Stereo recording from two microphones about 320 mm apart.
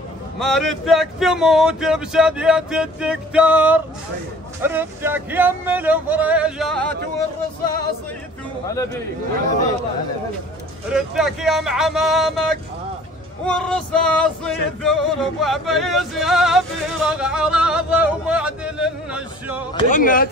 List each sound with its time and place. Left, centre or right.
0.4 s music: centre
10.9 s music: centre
19.7 s speech: centre